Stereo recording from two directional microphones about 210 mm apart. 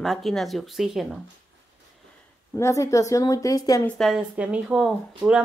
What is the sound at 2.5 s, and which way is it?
Speech, 15° left (ahead or behind).